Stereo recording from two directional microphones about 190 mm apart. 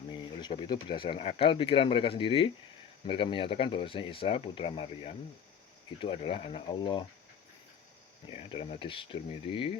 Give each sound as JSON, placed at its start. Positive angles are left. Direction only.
{"t": 0.1, "sound": "speech", "side_deg": 25}
{"t": 8.3, "sound": "speech", "side_deg": 30}